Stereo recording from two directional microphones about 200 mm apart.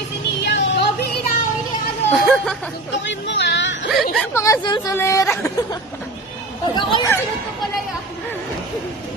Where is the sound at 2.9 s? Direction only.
65° left (ahead or behind).